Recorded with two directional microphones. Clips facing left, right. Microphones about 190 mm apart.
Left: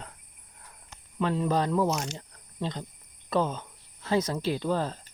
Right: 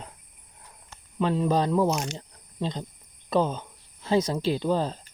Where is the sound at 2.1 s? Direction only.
20° right (ahead or behind).